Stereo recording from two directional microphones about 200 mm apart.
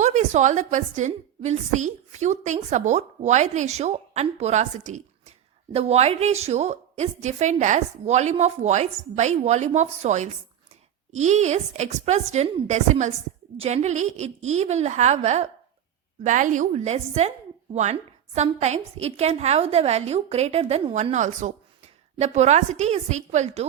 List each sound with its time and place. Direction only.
0.0 s a woman's voice: 35° right (ahead or behind)
18.3 s a woman's voice: 35° right (ahead or behind)